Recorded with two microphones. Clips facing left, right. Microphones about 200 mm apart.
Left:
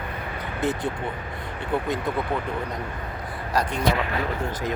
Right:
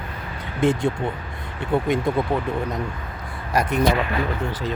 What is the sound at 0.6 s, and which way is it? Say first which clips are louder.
Speech: right 6 dB; 25° right (ahead or behind).